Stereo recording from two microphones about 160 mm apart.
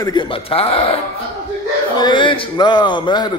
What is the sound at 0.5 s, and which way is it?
A man's voice, 35° left (ahead or behind).